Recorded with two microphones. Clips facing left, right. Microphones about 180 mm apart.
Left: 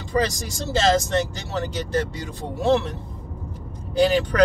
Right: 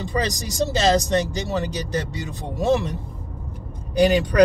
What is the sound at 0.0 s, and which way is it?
Speech, 15° right (ahead or behind).